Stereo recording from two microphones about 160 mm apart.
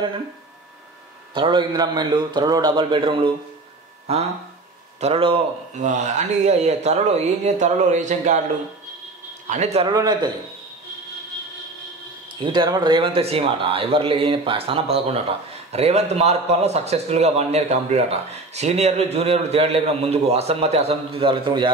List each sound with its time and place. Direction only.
1.3 s a man's voice: 30° right (ahead or behind); by 8.4 s 50° right (ahead or behind)
9.5 s speech: 45° right (ahead or behind)
9.8 s a man's voice: 25° right (ahead or behind)
12.4 s a man's voice: 25° right (ahead or behind)